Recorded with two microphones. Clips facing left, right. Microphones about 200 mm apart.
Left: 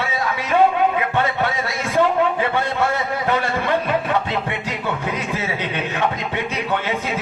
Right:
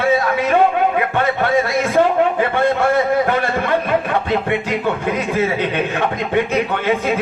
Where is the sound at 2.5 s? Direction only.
55° right (ahead or behind).